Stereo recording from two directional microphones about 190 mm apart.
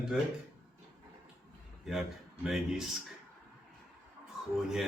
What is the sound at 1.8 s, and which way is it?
A man's voice, centre (ahead or behind).